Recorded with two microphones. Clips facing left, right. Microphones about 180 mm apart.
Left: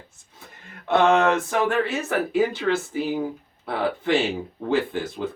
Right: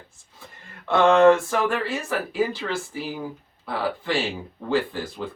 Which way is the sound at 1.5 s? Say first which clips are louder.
Left 2 dB; 20° left (ahead or behind).